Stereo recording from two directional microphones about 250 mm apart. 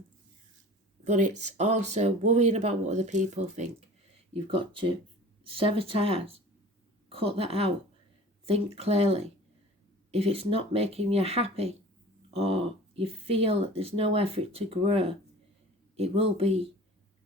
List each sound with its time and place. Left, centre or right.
1.0 s speech: right